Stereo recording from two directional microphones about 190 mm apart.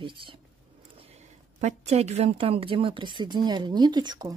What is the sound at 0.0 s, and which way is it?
A woman's voice, 25° right (ahead or behind).